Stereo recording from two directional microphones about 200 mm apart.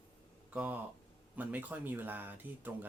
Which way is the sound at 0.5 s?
5° right (ahead or behind).